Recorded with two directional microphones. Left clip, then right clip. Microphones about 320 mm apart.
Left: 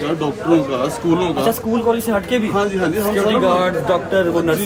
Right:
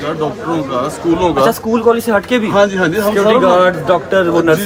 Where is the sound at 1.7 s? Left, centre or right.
Right.